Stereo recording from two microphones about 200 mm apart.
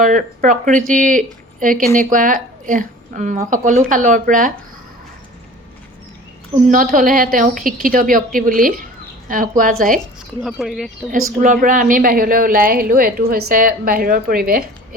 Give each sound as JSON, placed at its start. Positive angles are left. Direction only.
{"t": 0.0, "sound": "speech", "side_deg": -40}
{"t": 6.7, "sound": "a woman's voice", "side_deg": -40}
{"t": 10.4, "sound": "speech", "side_deg": 0}
{"t": 11.3, "sound": "a woman's voice", "side_deg": -40}